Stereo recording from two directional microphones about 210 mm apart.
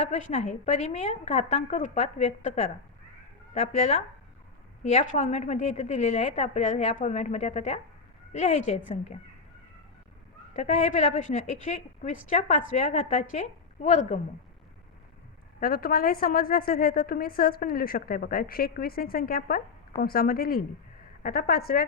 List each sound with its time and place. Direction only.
0.0 s a woman's voice: 35° left (ahead or behind)
3.7 s a woman's voice: 30° left (ahead or behind)
10.5 s a woman's voice: 35° left (ahead or behind)
15.6 s a woman's voice: 45° left (ahead or behind)